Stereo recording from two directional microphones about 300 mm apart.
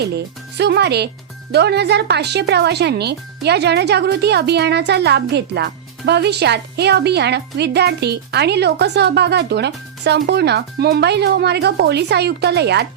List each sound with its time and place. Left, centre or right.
0.0 s speech: right